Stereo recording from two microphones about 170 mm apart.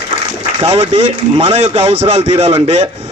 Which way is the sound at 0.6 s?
35° right (ahead or behind).